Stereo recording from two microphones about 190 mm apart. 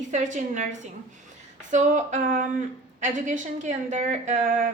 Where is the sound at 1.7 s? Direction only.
40° right (ahead or behind).